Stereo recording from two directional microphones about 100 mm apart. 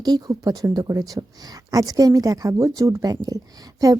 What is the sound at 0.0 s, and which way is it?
Speech, 40° right (ahead or behind).